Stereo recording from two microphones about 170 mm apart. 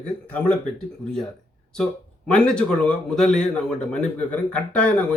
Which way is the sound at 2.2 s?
5° left (ahead or behind).